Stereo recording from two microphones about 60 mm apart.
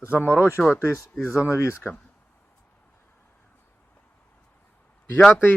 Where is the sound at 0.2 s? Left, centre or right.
Left.